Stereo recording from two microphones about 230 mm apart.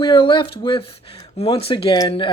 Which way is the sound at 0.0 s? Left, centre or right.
Left.